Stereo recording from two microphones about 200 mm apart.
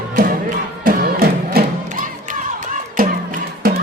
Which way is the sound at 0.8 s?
45° right (ahead or behind).